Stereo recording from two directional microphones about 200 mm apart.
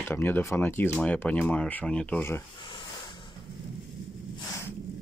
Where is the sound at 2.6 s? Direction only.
25° left (ahead or behind).